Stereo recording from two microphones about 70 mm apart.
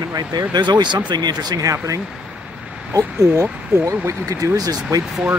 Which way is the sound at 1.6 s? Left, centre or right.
Right.